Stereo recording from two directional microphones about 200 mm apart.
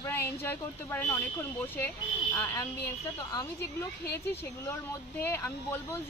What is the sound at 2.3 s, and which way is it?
Speech, 10° left (ahead or behind).